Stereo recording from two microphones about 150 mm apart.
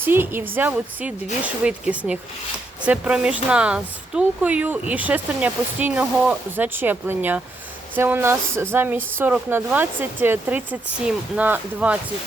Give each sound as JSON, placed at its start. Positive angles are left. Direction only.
{"t": 0.0, "sound": "speech", "side_deg": -15}